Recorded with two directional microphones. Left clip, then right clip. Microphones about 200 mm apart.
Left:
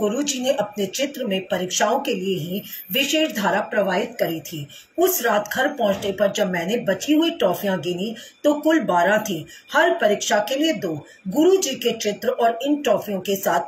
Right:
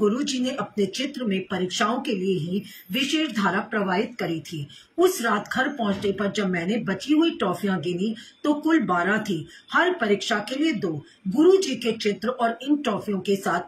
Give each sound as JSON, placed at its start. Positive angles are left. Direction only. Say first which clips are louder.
{"t": 0.2, "sound": "speech", "louder": "left 6 dB", "side_deg": 10}